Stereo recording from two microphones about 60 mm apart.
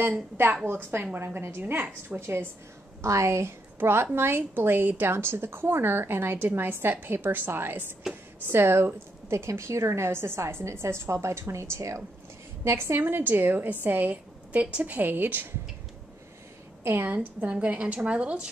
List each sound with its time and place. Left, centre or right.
1.1 s a woman's voice: right
3.0 s a woman's voice: right
16.8 s a woman's voice: right